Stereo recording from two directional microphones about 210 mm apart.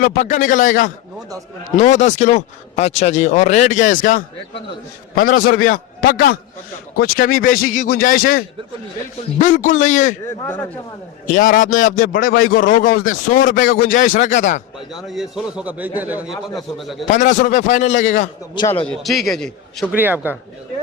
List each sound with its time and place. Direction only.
0.0 s a man's voice: 40° left (ahead or behind)
10.4 s speech: 10° left (ahead or behind)
11.3 s a man's voice: 40° left (ahead or behind)
14.9 s a man's voice: centre (ahead or behind)
17.1 s a man's voice: 35° left (ahead or behind)
18.5 s a man's voice: 20° left (ahead or behind)
18.9 s a man's voice: centre (ahead or behind)
20.0 s a man's voice: 10° right (ahead or behind)